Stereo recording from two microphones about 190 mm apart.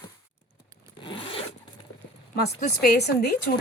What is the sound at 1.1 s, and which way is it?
Zipper, 25° left (ahead or behind).